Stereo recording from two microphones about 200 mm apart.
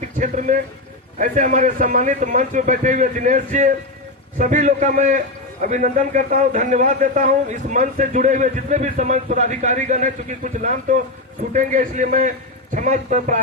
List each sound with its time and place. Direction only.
0.2 s a man's voice: 40° right (ahead or behind)